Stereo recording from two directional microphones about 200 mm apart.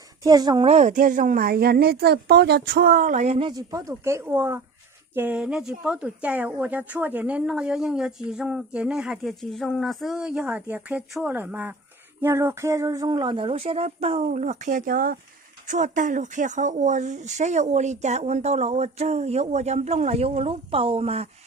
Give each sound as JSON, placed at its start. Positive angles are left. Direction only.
{"t": 0.2, "sound": "speech", "side_deg": -20}
{"t": 3.5, "sound": "a woman's voice", "side_deg": -15}